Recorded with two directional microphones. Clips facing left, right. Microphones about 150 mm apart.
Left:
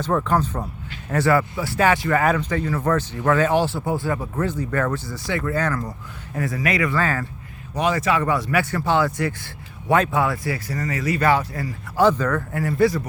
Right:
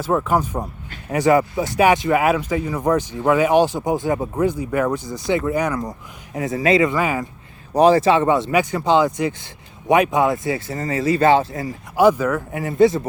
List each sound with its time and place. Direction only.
0.0 s speech: 5° right (ahead or behind)
7.7 s speech: 35° right (ahead or behind)
11.9 s speech: 10° right (ahead or behind)